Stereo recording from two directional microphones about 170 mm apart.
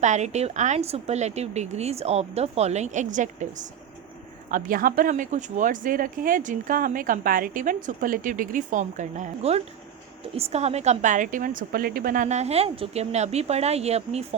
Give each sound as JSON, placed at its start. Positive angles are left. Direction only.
{"t": 0.0, "sound": "a woman's voice", "side_deg": -45}